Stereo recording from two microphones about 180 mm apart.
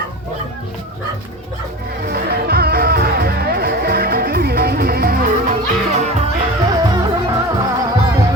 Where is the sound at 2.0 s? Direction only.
60° right (ahead or behind); by 6.1 s 40° right (ahead or behind).